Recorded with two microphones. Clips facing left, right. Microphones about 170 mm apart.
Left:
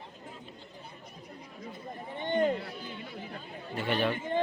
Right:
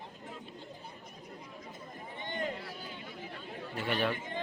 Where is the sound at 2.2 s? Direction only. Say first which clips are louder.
Left 10 dB; 25° left (ahead or behind).